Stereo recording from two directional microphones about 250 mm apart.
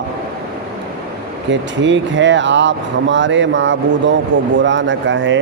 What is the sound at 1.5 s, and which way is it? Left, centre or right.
A man's voice, right.